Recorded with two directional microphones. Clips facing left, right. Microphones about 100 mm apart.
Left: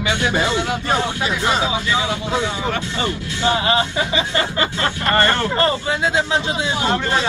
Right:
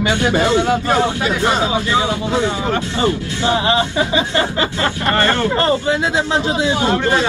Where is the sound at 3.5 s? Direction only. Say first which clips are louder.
Right 3 dB; 25° right (ahead or behind).